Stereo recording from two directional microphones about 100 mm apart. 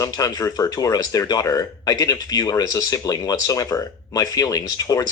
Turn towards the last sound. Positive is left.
turn(degrees=35)  # may be behind; listen again after turning